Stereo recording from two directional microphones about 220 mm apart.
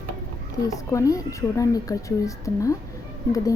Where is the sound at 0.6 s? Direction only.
15° left (ahead or behind).